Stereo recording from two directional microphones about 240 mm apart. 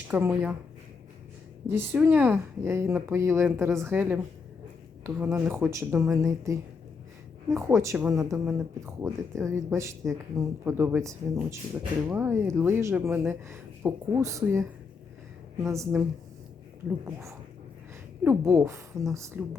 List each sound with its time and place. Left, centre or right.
0.1 s speech: centre
1.6 s speech: centre
17.1 s speech: centre